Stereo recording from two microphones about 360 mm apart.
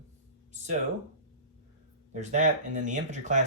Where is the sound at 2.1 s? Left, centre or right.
Centre.